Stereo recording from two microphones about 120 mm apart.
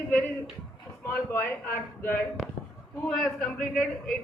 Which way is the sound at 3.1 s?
5° left (ahead or behind).